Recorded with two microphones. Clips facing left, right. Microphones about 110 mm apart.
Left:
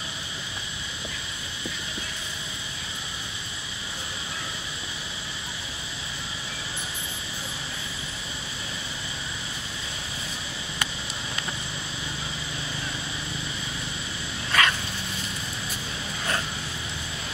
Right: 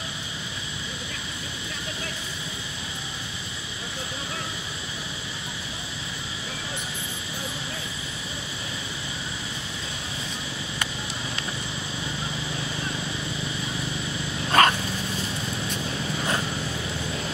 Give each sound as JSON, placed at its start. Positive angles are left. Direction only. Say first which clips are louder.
{"t": 14.5, "sound": "dog", "louder": "right 5 dB", "side_deg": -45}